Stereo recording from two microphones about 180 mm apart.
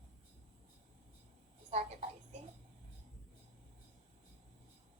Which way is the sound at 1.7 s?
40° right (ahead or behind).